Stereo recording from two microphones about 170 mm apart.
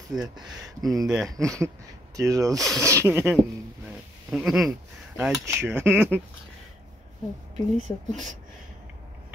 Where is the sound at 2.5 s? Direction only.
Centre (ahead or behind).